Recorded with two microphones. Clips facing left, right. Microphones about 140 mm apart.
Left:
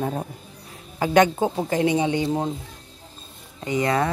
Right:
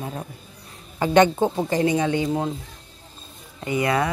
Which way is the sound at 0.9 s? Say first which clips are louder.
Right 1 dB; centre (ahead or behind).